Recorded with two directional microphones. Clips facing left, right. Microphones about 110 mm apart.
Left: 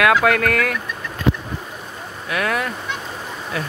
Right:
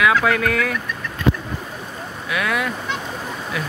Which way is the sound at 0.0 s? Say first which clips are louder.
Left 2 dB; 65° left (ahead or behind).